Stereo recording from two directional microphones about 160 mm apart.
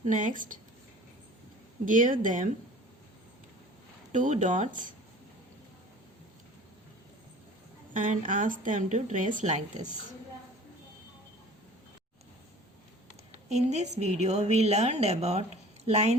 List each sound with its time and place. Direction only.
0.1 s speech: 55° right (ahead or behind)
1.8 s speech: 55° right (ahead or behind)
4.1 s a woman's voice: 50° right (ahead or behind)
7.9 s a woman's voice: 50° right (ahead or behind)
13.5 s a woman's voice: 45° right (ahead or behind)